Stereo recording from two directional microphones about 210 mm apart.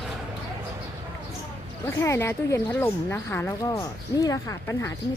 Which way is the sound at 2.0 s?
10° left (ahead or behind).